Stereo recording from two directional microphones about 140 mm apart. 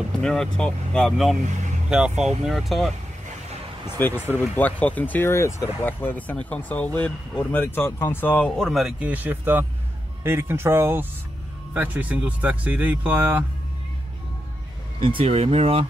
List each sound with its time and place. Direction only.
0.2 s speech: 5° left (ahead or behind)
4.0 s speech: 15° left (ahead or behind)
8.6 s speech: 5° right (ahead or behind)
15.0 s speech: 40° right (ahead or behind)